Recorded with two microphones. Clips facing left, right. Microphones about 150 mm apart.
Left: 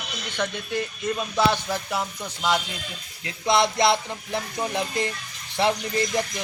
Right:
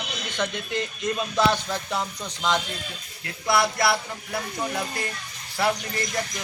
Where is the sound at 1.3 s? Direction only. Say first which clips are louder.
Left 1 dB; 10° left (ahead or behind).